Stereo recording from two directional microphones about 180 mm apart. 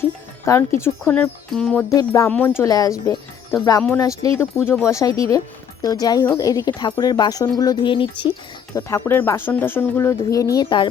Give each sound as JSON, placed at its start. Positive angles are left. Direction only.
{"t": 0.4, "sound": "speech", "side_deg": 15}
{"t": 1.9, "sound": "speech", "side_deg": 15}
{"t": 8.7, "sound": "speech", "side_deg": 15}